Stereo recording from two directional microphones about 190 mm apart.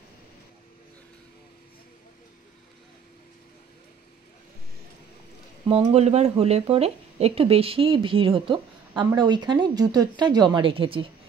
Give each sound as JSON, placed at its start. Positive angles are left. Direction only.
{"t": 5.7, "sound": "speech", "side_deg": -35}